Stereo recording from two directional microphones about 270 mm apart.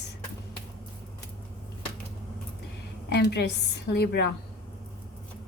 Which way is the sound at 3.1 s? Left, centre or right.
Left.